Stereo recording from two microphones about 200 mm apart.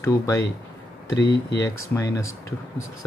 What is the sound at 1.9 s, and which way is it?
Speech, 15° left (ahead or behind).